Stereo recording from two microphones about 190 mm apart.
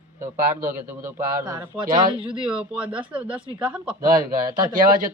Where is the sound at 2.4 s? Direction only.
5° right (ahead or behind).